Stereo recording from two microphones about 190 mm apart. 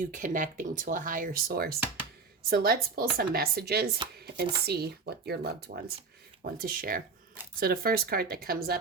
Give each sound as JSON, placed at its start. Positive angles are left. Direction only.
{"t": 0.0, "sound": "speech", "side_deg": -45}